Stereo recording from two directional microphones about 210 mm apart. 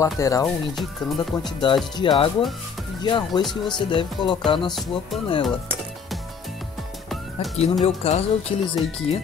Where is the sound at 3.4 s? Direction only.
20° left (ahead or behind).